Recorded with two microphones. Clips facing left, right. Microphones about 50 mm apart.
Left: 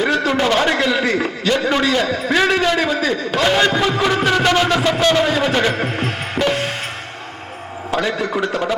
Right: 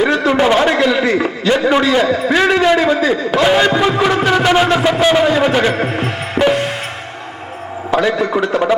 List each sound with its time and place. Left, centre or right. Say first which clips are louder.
0.0 s a sound: right 4 dB; centre
0.6 s a man's voice: right 4 dB; centre
7.9 s a man's voice: right 5 dB; centre